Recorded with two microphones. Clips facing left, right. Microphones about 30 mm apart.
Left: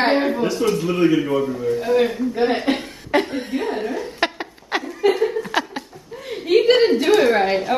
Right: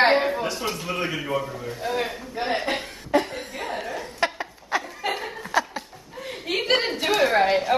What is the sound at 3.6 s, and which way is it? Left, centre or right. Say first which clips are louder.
Laughter: left 6 dB; left.